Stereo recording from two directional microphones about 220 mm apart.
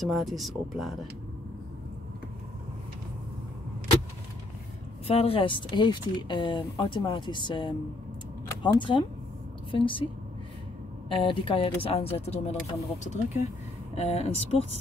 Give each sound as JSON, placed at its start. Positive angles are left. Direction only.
{"t": 0.0, "sound": "speech", "side_deg": 0}
{"t": 5.0, "sound": "speech", "side_deg": 25}
{"t": 8.7, "sound": "a woman's voice", "side_deg": 20}
{"t": 11.1, "sound": "speech", "side_deg": 25}